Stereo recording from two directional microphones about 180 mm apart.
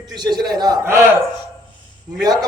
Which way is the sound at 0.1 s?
25° right (ahead or behind).